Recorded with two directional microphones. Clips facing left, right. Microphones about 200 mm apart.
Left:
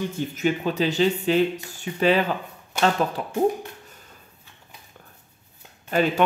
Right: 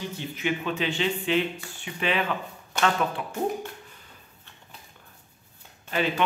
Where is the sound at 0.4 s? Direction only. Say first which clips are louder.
Left 5 dB; 40° left (ahead or behind).